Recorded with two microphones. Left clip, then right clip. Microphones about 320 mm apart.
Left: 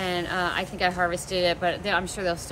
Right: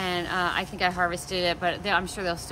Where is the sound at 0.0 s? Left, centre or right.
Centre.